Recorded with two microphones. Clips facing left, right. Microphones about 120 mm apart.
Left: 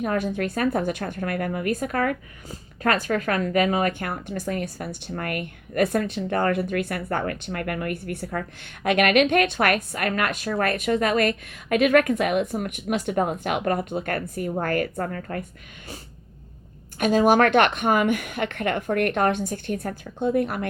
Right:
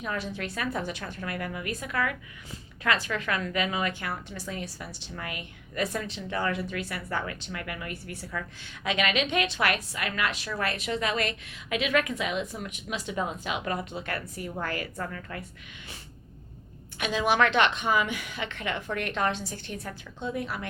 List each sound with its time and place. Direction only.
0.0 s a woman's voice: 50° left (ahead or behind)
17.0 s a woman's voice: 45° left (ahead or behind)